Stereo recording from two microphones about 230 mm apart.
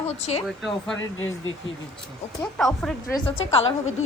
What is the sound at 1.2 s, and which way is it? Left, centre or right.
Speech, left.